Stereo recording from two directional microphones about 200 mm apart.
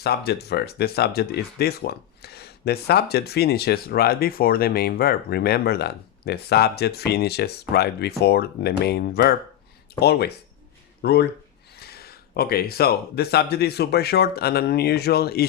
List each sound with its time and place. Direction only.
0.0 s speech: 55° left (ahead or behind)